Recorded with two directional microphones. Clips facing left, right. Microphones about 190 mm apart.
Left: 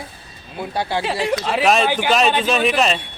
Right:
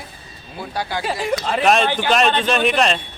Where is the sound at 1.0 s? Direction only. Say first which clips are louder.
Right 1 dB; centre (ahead or behind).